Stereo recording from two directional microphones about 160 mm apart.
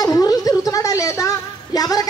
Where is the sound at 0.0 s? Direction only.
25° left (ahead or behind).